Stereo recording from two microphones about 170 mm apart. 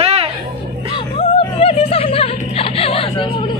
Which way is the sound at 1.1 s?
35° left (ahead or behind).